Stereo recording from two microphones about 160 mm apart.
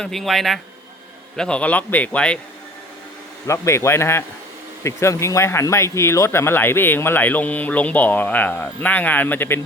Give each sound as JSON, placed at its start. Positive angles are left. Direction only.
{"t": 0.0, "sound": "speech", "side_deg": 0}
{"t": 3.4, "sound": "speech", "side_deg": 20}